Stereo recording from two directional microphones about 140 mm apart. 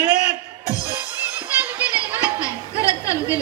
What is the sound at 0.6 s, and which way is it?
Music, 25° left (ahead or behind).